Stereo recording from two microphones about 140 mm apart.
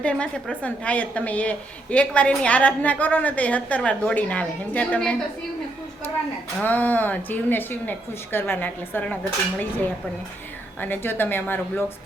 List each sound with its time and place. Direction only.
0.0 s a woman's voice: 10° left (ahead or behind)
6.6 s a woman's voice: 10° left (ahead or behind)